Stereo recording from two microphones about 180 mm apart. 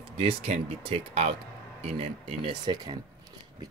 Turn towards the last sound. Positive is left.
turn(degrees=-25)  # may be behind; listen again after turning